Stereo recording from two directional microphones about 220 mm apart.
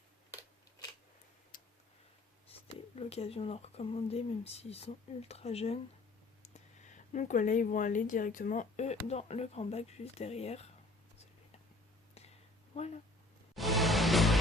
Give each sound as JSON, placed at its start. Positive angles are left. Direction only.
{"t": 1.5, "sound": "tick-tock", "side_deg": 40}
{"t": 2.5, "sound": "speech", "side_deg": 30}
{"t": 12.7, "sound": "speech", "side_deg": 30}
{"t": 13.6, "sound": "music", "side_deg": 0}